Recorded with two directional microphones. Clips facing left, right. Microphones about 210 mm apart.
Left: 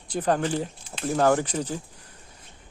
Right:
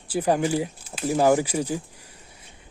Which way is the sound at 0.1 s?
10° right (ahead or behind).